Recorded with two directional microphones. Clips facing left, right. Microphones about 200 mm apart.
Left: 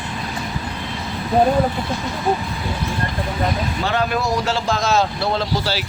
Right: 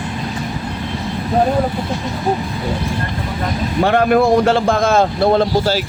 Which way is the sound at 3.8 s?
55° right (ahead or behind).